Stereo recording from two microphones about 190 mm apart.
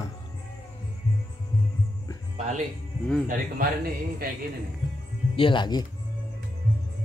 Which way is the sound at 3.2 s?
45° right (ahead or behind).